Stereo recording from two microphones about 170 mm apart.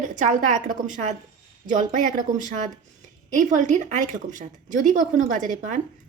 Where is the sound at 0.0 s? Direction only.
45° right (ahead or behind).